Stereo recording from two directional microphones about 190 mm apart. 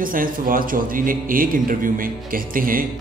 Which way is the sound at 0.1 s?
45° right (ahead or behind).